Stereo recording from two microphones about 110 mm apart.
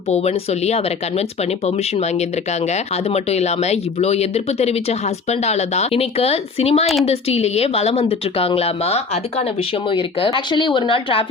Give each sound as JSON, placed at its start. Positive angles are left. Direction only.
{"t": 0.1, "sound": "speech", "side_deg": 75}
{"t": 1.6, "sound": "a woman's voice", "side_deg": 85}
{"t": 9.9, "sound": "speech", "side_deg": 50}